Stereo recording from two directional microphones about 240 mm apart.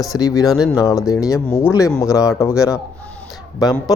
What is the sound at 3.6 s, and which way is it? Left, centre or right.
Speech, centre.